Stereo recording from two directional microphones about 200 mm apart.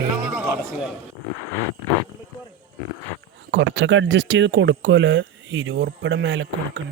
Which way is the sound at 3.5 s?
65° right (ahead or behind).